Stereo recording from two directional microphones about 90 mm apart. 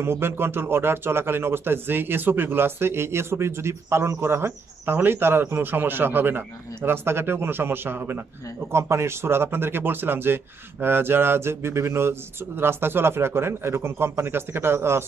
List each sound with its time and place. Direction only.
0.0 s speech: 25° right (ahead or behind)